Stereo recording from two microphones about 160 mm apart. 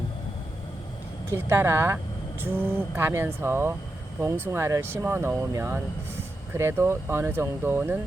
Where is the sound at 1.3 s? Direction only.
15° right (ahead or behind).